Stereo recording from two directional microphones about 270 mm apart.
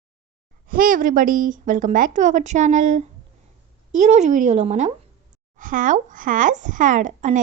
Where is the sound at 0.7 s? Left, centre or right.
Right.